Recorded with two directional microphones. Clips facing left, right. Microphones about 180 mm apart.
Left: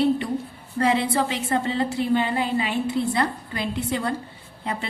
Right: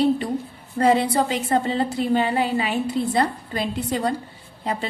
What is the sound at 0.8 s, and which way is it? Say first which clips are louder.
Speech: right 3 dB; 40° right (ahead or behind).